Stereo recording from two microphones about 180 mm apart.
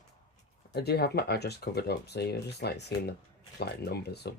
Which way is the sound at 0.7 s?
65° left (ahead or behind).